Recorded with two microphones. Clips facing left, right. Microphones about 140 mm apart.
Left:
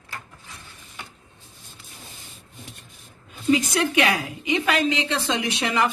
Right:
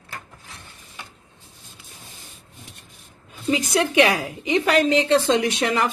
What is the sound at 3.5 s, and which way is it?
A woman's voice, 35° right (ahead or behind).